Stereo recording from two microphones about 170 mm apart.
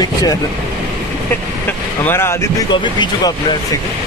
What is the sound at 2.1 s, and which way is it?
Speech, 15° left (ahead or behind).